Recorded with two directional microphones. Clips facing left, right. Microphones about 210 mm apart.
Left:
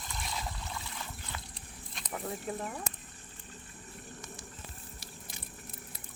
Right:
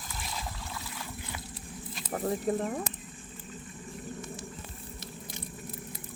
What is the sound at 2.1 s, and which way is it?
Speech, 40° right (ahead or behind).